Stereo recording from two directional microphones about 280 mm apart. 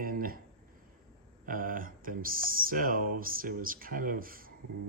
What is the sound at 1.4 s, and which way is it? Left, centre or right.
Speech, right.